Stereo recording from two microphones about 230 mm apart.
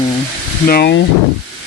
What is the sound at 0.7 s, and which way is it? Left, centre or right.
Speech, left.